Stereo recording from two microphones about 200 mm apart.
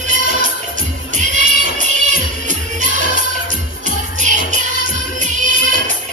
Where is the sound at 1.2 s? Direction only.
35° right (ahead or behind).